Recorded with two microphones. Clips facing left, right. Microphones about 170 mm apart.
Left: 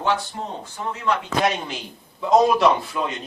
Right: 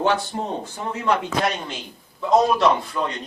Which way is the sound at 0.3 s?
40° right (ahead or behind).